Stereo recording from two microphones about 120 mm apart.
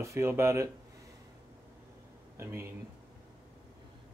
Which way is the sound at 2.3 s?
20° right (ahead or behind).